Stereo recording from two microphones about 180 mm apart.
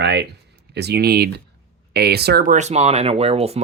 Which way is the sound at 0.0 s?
70° right (ahead or behind).